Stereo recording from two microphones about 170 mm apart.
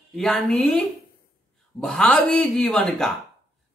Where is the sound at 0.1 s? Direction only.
Centre (ahead or behind).